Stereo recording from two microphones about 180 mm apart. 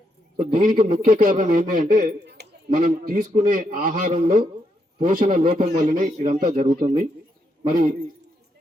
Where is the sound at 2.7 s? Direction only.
50° right (ahead or behind).